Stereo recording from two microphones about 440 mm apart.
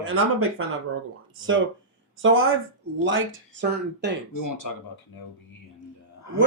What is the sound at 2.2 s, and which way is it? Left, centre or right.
Speech, right.